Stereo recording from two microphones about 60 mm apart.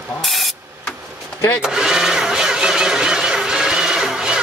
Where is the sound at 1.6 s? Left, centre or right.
Centre.